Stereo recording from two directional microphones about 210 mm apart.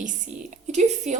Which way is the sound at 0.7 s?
35° right (ahead or behind).